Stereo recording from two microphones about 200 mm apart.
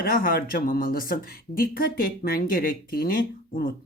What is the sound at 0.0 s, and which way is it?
Speech, 45° left (ahead or behind).